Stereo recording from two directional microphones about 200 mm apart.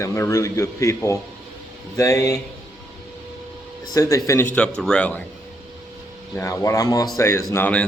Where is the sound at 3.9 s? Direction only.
15° left (ahead or behind).